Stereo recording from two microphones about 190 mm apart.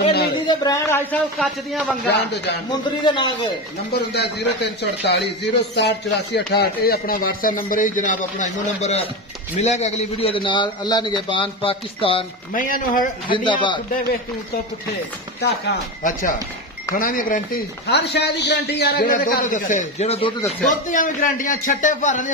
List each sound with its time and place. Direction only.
0.5 s speech: 20° left (ahead or behind)
1.1 s a man's voice: 5° left (ahead or behind)
2.0 s speech: 65° left (ahead or behind)
2.7 s a man's voice: 25° left (ahead or behind)
4.1 s a man's voice: 60° left (ahead or behind); by 12.3 s 30° left (ahead or behind)
12.5 s speech: 45° left (ahead or behind)
13.3 s a man's voice: 25° left (ahead or behind)
15.4 s speech: 50° left (ahead or behind); by 20.5 s 30° left (ahead or behind)
20.9 s speech: 45° left (ahead or behind)